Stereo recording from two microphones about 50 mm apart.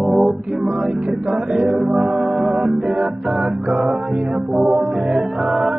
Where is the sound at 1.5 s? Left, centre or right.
Centre.